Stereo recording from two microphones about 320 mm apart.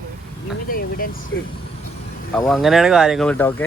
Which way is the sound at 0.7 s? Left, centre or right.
Left.